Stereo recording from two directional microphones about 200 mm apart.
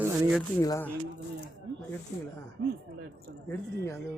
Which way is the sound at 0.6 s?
15° left (ahead or behind).